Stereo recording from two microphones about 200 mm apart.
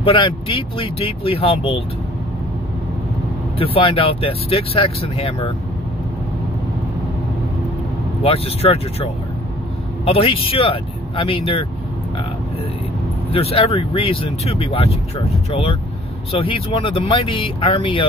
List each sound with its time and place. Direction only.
0.0 s speech: 25° left (ahead or behind)
3.5 s speech: 30° left (ahead or behind)
8.2 s speech: 30° left (ahead or behind)
13.3 s speech: 30° left (ahead or behind)